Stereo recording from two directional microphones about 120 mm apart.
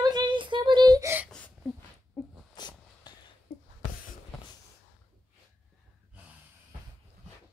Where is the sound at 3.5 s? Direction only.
55° left (ahead or behind).